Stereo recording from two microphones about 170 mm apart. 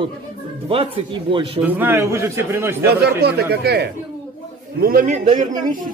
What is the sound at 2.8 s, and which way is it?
Speech, 70° right (ahead or behind).